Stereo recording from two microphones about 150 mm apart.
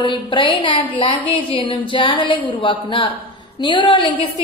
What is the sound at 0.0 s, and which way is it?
A woman's voice, 35° left (ahead or behind).